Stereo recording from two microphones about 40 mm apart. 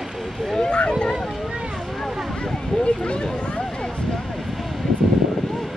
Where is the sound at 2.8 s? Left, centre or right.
Left.